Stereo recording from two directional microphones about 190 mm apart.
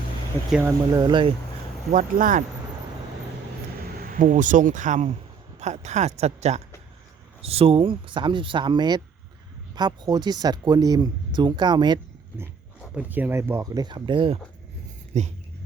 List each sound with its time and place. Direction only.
0.9 s speech: 25° right (ahead or behind)
1.9 s speech: 45° right (ahead or behind)
4.1 s speech: 40° right (ahead or behind); by 11.9 s 25° right (ahead or behind)
12.9 s speech: 10° right (ahead or behind); by 15.3 s 35° right (ahead or behind)